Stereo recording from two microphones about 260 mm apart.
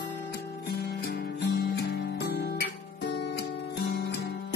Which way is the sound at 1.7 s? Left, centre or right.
Left.